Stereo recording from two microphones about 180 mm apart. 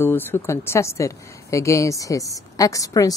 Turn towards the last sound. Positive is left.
turn(degrees=20)  # may be behind; listen again after turning